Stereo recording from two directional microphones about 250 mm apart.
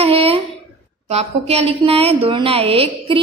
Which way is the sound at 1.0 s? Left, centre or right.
Right.